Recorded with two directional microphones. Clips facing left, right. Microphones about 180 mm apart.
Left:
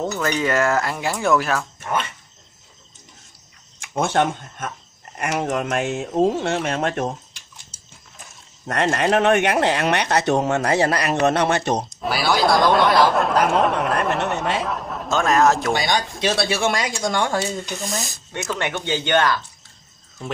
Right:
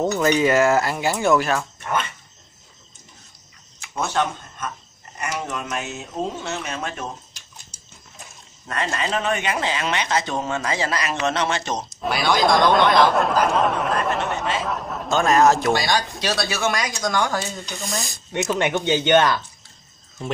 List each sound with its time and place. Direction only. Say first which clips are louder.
0.0 s speech: right 4 dB; 15° right (ahead or behind)
3.9 s speech: left 4 dB; 55° left (ahead or behind)
8.6 s speech: left 6 dB; 65° left (ahead or behind)
11.9 s speech: even; centre (ahead or behind)
14.6 s a sound: left 1 dB; centre (ahead or behind)
15.7 s speech: even; 20° left (ahead or behind)
17.6 s speech: left 2 dB; centre (ahead or behind)
18.3 s speech: right 4 dB; 20° right (ahead or behind)